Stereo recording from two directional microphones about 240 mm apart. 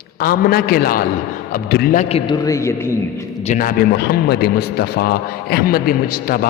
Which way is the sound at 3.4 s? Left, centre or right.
Left.